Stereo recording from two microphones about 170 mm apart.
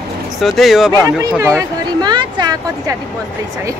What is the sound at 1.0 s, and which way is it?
Speech, 20° right (ahead or behind).